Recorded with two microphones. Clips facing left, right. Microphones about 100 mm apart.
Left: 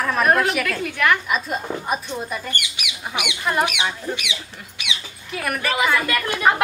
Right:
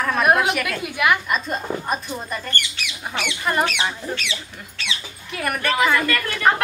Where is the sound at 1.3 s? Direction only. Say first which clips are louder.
Even; 5° left (ahead or behind).